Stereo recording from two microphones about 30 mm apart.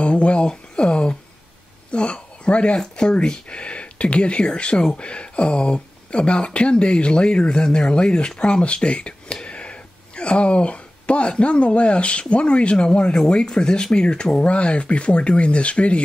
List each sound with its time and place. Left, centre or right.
0.0 s speech: left
2.8 s speech: left